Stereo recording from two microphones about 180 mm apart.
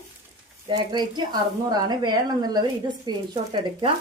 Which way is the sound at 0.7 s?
25° right (ahead or behind).